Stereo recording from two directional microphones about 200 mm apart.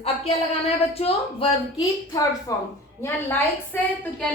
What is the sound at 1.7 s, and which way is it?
A woman's voice, 20° left (ahead or behind).